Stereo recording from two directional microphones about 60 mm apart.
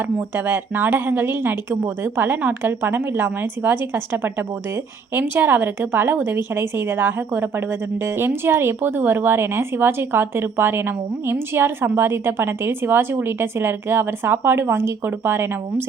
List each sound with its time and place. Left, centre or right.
0.3 s a woman's voice: right